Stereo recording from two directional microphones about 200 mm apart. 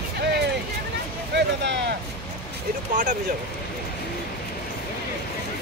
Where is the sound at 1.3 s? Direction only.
60° right (ahead or behind).